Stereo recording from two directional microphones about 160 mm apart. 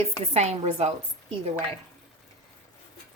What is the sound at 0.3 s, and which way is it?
Speech, 45° right (ahead or behind).